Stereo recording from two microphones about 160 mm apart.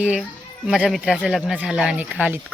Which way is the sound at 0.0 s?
5° right (ahead or behind).